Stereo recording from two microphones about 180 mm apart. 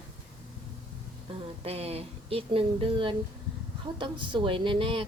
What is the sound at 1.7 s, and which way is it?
A woman's voice, 35° right (ahead or behind).